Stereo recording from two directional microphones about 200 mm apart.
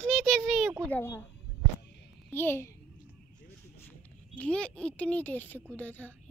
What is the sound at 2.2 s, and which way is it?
Speech, 10° left (ahead or behind).